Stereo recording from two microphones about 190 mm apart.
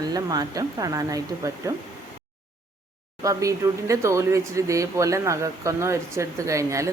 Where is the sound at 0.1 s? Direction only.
20° right (ahead or behind).